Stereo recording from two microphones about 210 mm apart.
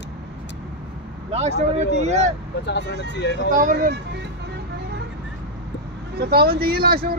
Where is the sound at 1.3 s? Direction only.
30° right (ahead or behind).